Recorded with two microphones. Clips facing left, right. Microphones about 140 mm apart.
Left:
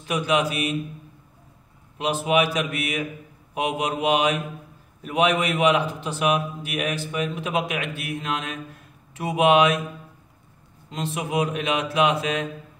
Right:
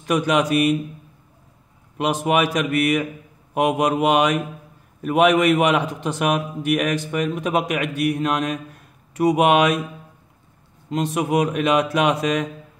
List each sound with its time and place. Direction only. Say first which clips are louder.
0.0 s a man's voice: right 3 dB; 55° right (ahead or behind)
2.0 s a man's voice: right 2 dB; 55° right (ahead or behind)
10.9 s a man's voice: right 7 dB; 55° right (ahead or behind)